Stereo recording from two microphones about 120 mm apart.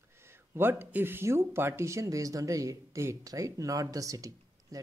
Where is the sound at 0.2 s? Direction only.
20° right (ahead or behind).